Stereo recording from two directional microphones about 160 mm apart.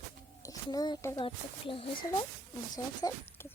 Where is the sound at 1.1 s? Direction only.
35° left (ahead or behind).